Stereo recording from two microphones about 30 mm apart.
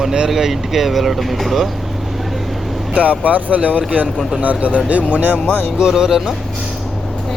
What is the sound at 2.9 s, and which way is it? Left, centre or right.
Speech, right.